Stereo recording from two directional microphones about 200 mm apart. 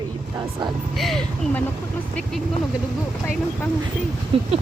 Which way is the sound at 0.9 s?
Centre (ahead or behind).